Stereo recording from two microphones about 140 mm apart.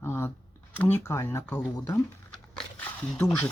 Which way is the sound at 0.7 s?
20° left (ahead or behind).